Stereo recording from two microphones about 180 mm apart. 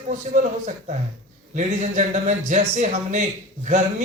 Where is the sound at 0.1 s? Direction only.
45° right (ahead or behind).